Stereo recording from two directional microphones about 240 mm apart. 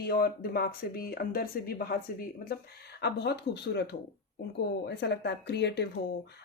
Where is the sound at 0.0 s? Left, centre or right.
Left.